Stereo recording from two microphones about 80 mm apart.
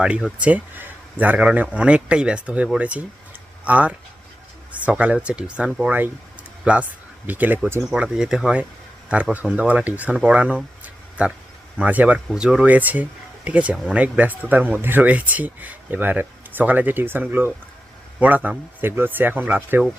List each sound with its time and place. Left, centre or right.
0.0 s speech: centre
7.3 s speech: right
7.9 s speech: centre
9.3 s speech: centre
10.2 s a sound: centre
11.8 s speech: centre
12.3 s speech: centre; by 19.8 s right